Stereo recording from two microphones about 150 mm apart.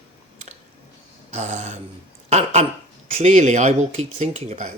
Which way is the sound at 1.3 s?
50° right (ahead or behind).